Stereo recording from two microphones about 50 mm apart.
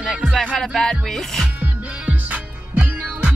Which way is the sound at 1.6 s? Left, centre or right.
Right.